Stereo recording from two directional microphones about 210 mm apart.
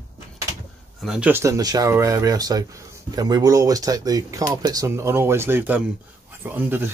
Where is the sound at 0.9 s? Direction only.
Centre (ahead or behind).